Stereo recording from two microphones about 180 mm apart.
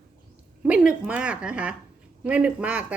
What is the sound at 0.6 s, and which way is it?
A woman's voice, 5° right (ahead or behind).